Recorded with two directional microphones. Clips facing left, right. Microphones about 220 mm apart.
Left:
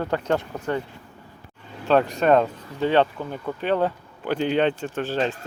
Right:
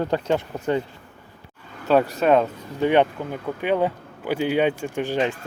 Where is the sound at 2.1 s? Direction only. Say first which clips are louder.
Even; 5° right (ahead or behind).